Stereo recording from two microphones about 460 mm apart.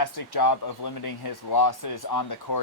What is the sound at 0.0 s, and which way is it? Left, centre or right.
Speech, left.